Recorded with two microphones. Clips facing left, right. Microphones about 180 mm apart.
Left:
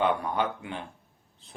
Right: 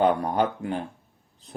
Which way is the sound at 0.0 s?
40° right (ahead or behind).